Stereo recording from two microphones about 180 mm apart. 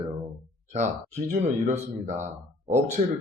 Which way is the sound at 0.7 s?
40° right (ahead or behind).